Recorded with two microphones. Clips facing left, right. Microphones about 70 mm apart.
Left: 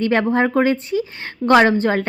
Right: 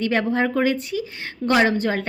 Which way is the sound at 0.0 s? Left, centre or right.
Left.